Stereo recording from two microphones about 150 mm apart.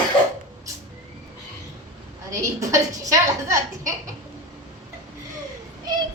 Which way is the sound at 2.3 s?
20° right (ahead or behind).